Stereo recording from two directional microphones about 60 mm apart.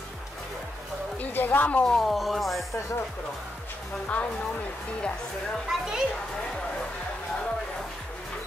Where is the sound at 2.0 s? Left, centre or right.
Centre.